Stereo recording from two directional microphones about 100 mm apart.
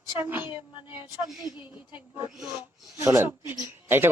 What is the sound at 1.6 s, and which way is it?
A woman's voice, 15° right (ahead or behind).